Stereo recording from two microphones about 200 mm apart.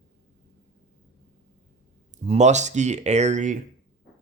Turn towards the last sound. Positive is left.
turn(degrees=-35)  # may be behind; listen again after turning